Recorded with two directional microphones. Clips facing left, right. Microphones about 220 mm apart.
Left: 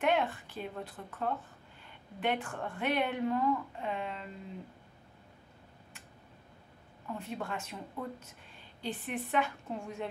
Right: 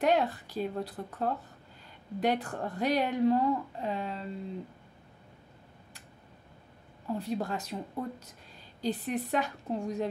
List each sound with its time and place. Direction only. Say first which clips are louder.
0.0 s speech: right 3 dB; 35° right (ahead or behind)
7.1 s speech: right 6 dB; 35° right (ahead or behind)